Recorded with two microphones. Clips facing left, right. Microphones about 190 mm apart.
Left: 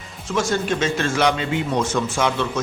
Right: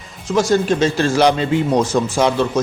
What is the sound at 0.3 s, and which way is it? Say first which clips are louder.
A man's voice: right 6 dB; 35° right (ahead or behind).